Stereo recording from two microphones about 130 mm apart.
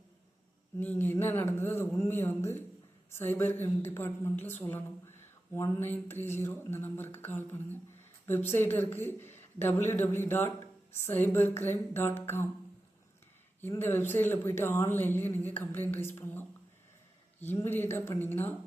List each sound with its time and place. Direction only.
0.8 s speech: 15° left (ahead or behind)
13.6 s speech: 20° left (ahead or behind)